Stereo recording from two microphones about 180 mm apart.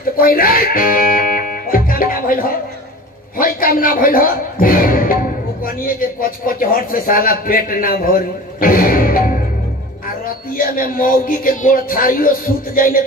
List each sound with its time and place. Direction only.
0.2 s music: 55° left (ahead or behind)
3.3 s a man's voice: 50° left (ahead or behind)